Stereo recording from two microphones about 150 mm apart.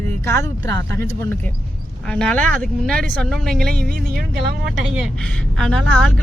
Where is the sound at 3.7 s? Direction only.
90° right.